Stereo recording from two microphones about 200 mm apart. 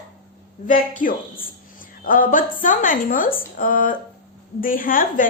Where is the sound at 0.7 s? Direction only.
40° left (ahead or behind).